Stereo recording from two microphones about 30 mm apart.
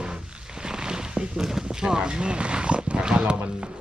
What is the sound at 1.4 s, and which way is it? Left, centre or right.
Dog, centre.